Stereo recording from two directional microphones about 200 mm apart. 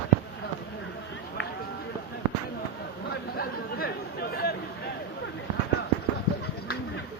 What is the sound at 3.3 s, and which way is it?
Chatter, 50° left (ahead or behind).